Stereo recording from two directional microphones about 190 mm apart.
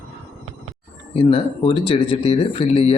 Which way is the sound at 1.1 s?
30° left (ahead or behind).